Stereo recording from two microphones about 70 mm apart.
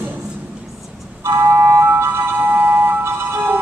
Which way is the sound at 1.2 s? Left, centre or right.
Right.